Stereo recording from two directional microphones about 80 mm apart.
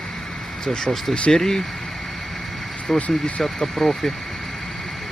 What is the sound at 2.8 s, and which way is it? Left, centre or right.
Speech, centre.